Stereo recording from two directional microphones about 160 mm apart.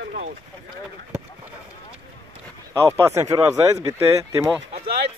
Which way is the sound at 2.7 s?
20° right (ahead or behind).